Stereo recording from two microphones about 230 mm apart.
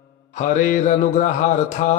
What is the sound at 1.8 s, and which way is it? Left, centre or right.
Speech, left.